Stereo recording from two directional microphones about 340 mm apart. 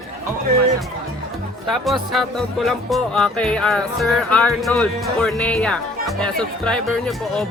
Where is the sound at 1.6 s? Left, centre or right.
Centre.